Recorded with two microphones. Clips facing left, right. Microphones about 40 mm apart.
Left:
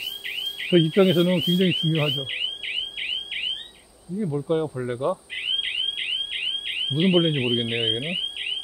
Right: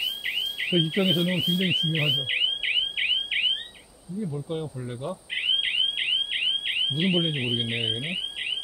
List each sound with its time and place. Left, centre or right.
0.4 s speech: centre
2.3 s alarm: centre
4.2 s speech: left
5.3 s alarm: centre
7.0 s speech: centre